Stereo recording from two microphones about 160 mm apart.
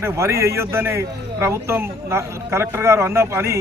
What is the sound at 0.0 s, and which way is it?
A man's voice, 15° right (ahead or behind).